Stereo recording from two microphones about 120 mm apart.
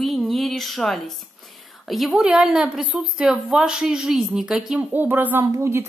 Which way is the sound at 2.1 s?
5° right (ahead or behind).